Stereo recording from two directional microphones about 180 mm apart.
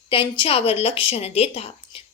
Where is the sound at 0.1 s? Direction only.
30° left (ahead or behind).